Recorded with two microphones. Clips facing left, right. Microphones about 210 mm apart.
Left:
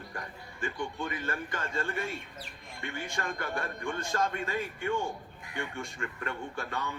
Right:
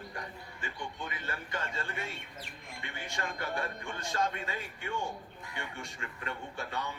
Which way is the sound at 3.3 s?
50° left (ahead or behind).